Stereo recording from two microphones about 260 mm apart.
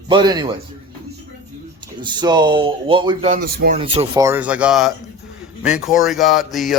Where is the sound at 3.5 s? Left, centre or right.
Right.